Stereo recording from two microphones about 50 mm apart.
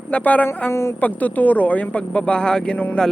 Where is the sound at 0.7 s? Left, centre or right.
Left.